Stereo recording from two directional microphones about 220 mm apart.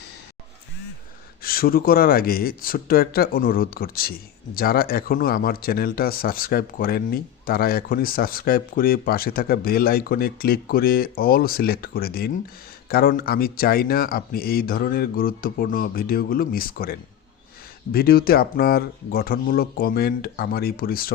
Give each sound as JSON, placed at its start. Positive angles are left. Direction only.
{"t": 1.4, "sound": "speech", "side_deg": 40}